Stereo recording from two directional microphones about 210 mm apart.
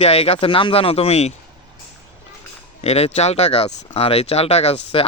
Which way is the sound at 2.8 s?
30° left (ahead or behind).